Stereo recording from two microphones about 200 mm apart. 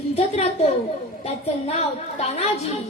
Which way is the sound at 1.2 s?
30° left (ahead or behind).